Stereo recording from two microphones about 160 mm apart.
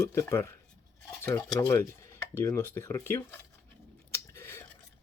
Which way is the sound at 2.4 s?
20° left (ahead or behind).